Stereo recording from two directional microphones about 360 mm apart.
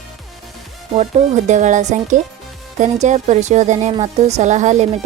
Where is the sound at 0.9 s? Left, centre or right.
Centre.